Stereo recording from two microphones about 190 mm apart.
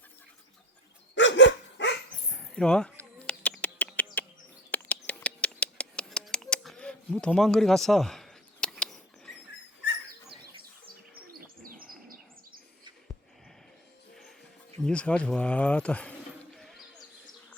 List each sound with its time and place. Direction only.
1.1 s dog: 70° left (ahead or behind)
2.3 s bird: 5° left (ahead or behind)
11.3 s bird: 50° right (ahead or behind)
14.8 s speech: 5° left (ahead or behind)
16.6 s a sound: centre (ahead or behind)